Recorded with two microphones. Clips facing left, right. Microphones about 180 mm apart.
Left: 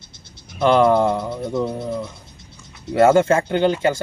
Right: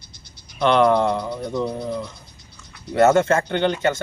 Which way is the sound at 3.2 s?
10° left (ahead or behind).